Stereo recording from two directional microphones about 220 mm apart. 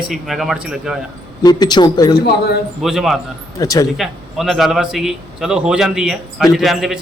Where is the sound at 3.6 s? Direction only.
15° left (ahead or behind).